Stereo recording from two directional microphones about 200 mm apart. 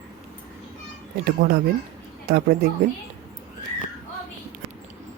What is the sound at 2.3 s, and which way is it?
Speech, 50° right (ahead or behind).